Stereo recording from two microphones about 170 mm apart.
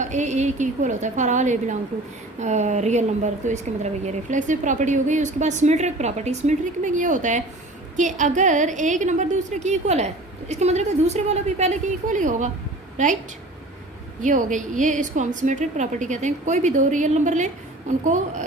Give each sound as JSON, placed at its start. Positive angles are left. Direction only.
{"t": 0.0, "sound": "a woman's voice", "side_deg": -45}
{"t": 14.2, "sound": "a woman's voice", "side_deg": -50}